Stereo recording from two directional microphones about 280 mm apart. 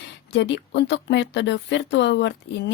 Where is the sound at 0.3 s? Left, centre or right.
Left.